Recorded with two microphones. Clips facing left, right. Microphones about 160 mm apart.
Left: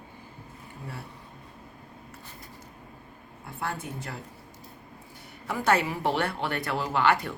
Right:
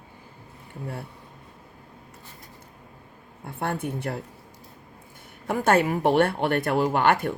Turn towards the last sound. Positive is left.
turn(degrees=-55)  # may be behind; listen again after turning